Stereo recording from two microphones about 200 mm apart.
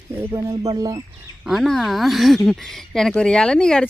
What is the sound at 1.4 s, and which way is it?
Speech, centre (ahead or behind).